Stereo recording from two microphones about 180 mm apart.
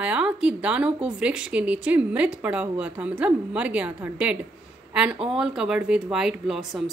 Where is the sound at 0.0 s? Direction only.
5° right (ahead or behind).